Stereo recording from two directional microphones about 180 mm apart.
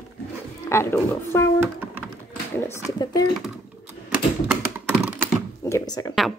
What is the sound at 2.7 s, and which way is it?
Speech, 20° left (ahead or behind).